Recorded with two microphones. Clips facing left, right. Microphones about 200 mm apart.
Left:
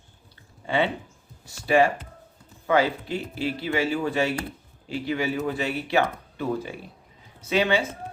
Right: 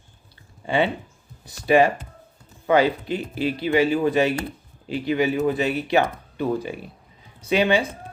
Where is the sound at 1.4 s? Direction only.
15° right (ahead or behind).